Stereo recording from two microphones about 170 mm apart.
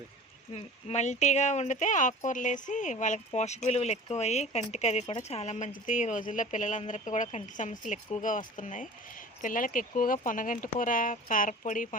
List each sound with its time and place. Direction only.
0.5 s speech: 40° left (ahead or behind)